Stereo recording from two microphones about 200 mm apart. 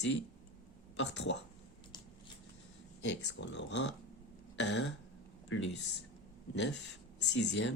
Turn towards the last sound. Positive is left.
turn(degrees=65)  # may be behind; listen again after turning